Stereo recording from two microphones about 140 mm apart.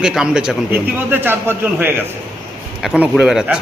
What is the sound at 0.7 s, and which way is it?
A man's voice, 15° right (ahead or behind).